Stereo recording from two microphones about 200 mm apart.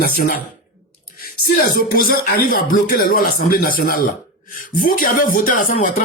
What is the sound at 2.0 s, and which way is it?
Speech, 45° left (ahead or behind).